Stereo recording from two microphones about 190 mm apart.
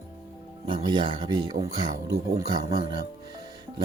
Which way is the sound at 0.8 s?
25° right (ahead or behind).